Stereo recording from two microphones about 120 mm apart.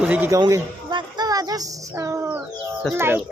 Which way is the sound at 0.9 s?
35° right (ahead or behind).